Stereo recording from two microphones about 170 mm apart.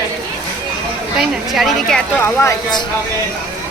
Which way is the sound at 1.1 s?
Centre (ahead or behind).